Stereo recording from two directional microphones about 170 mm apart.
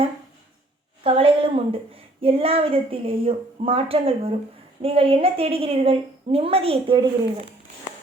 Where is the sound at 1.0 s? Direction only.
35° right (ahead or behind).